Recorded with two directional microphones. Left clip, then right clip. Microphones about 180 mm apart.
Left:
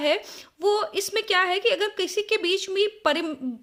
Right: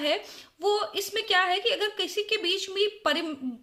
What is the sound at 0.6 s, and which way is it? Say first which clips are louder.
A woman's voice: left 3 dB; 40° left (ahead or behind).